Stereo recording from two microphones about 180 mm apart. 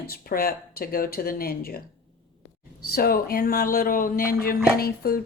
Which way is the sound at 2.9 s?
55° left (ahead or behind).